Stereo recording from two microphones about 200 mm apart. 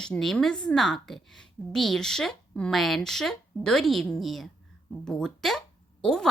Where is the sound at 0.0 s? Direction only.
5° left (ahead or behind).